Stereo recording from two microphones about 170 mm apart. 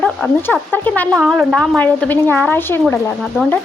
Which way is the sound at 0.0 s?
5° left (ahead or behind).